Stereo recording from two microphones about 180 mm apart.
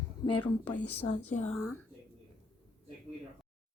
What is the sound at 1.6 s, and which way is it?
Speech, 15° left (ahead or behind).